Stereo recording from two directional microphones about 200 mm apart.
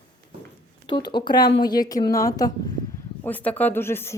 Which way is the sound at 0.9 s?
20° left (ahead or behind).